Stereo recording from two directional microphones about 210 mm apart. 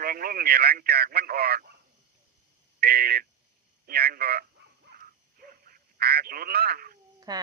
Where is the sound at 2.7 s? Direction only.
45° right (ahead or behind).